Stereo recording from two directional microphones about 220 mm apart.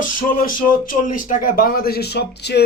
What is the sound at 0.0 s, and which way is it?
Speech, 40° left (ahead or behind).